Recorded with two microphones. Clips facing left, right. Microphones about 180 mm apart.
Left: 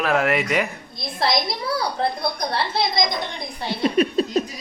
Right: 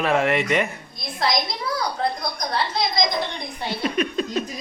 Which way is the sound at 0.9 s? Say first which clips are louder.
Left 3 dB; 25° left (ahead or behind).